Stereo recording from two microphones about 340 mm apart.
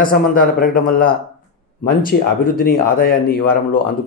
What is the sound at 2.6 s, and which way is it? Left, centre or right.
Speech, left.